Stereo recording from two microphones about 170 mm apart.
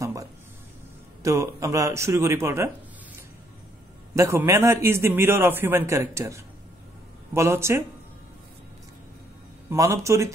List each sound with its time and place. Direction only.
0.0 s a sound: 20° right (ahead or behind)
1.2 s a man's voice: 20° right (ahead or behind)
4.1 s a man's voice: 15° right (ahead or behind)
9.7 s a man's voice: 15° right (ahead or behind)